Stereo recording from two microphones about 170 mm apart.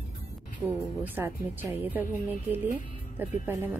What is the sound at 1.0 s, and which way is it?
Speech, 15° right (ahead or behind).